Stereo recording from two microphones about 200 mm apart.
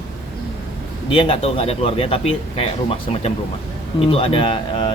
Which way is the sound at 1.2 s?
30° left (ahead or behind).